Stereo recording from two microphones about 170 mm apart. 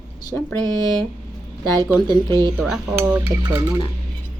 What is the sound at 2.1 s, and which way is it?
Speech, 25° right (ahead or behind).